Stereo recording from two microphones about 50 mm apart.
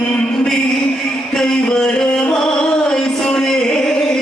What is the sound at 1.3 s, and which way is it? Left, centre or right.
Music, centre.